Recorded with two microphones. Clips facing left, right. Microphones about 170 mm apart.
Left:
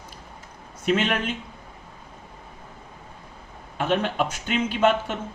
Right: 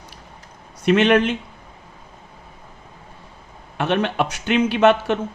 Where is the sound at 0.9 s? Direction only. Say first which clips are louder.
Right 8 dB; 75° right (ahead or behind).